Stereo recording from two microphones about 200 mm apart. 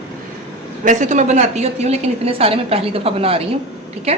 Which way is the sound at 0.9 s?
40° right (ahead or behind).